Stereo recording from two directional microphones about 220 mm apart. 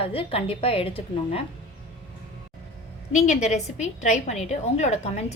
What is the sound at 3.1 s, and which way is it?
A woman's voice, 30° left (ahead or behind).